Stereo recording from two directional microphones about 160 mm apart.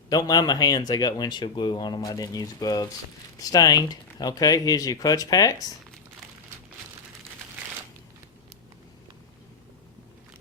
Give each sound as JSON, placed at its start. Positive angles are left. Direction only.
{"t": 0.1, "sound": "speech", "side_deg": 25}